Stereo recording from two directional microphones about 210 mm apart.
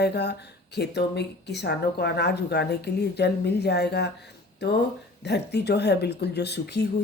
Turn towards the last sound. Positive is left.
turn(degrees=55)  # may be behind; listen again after turning